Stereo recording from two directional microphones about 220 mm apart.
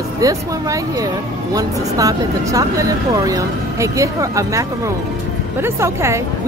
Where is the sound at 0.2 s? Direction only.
15° right (ahead or behind).